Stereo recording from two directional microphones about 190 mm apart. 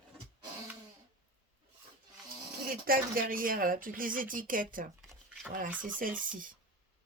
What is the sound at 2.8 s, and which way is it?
Speech, 50° right (ahead or behind).